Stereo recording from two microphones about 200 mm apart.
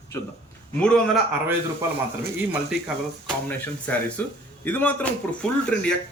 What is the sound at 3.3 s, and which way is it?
Speech, 10° left (ahead or behind).